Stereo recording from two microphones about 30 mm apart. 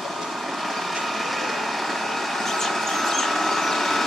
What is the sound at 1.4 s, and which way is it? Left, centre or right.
Vehicle, centre.